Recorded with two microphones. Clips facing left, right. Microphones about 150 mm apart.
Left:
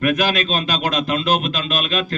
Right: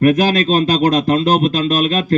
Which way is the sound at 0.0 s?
45° right (ahead or behind).